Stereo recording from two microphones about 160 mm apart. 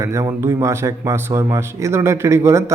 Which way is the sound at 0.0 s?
20° right (ahead or behind).